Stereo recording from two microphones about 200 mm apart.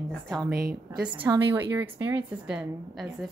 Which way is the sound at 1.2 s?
15° right (ahead or behind).